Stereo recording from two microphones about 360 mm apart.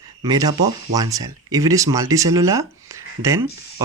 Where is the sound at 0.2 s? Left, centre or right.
Centre.